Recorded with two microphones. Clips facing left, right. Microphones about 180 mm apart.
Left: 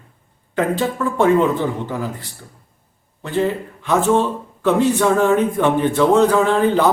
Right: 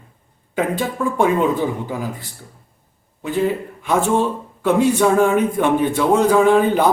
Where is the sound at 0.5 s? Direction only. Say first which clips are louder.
Left 1 dB; 15° right (ahead or behind).